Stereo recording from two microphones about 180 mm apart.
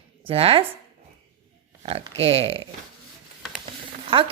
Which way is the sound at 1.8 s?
35° right (ahead or behind).